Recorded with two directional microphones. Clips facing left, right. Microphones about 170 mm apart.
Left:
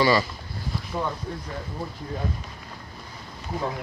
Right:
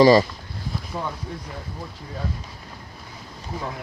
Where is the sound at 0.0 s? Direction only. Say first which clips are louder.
Right 7 dB; 40° right (ahead or behind).